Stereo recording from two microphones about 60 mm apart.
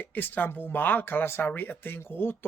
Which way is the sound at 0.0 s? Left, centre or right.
Left.